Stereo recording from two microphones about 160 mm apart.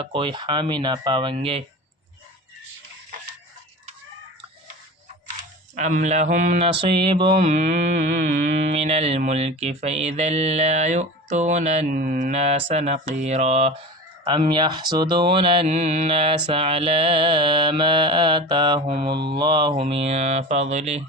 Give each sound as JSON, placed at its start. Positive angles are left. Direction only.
{"t": 0.0, "sound": "mantra", "side_deg": -35}
{"t": 5.7, "sound": "speech", "side_deg": -50}
{"t": 6.7, "sound": "mantra", "side_deg": -35}
{"t": 7.5, "sound": "speech", "side_deg": -50}
{"t": 14.3, "sound": "mantra", "side_deg": -30}